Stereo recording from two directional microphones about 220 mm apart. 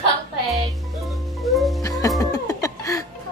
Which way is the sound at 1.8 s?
15° left (ahead or behind).